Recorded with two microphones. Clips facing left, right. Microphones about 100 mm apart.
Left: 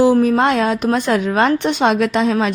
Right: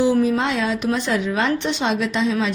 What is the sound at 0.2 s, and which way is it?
A woman's voice, 55° left (ahead or behind).